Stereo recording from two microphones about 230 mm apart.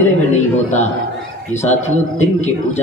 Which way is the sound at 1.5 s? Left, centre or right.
Left.